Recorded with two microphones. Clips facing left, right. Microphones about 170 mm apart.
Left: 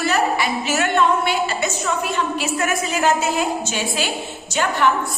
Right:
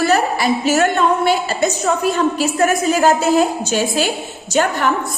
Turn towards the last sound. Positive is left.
turn(degrees=-45)  # may be behind; listen again after turning